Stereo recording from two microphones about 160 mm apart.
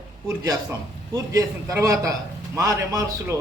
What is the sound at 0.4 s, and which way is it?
A man's voice, 20° right (ahead or behind).